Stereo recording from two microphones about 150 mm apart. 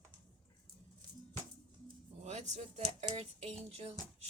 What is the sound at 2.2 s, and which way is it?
Speech, 50° right (ahead or behind).